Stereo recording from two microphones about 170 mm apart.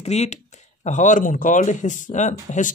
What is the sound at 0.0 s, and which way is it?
Speech, 40° left (ahead or behind).